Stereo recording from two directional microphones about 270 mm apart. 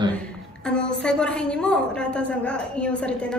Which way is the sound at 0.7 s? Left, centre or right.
Centre.